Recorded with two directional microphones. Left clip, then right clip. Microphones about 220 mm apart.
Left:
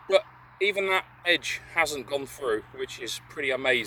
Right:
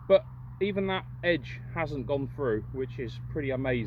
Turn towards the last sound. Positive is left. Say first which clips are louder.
# left 5 dB
turn(degrees=10)  # may be behind; listen again after turning